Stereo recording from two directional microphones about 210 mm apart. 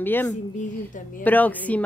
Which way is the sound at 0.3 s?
35° left (ahead or behind).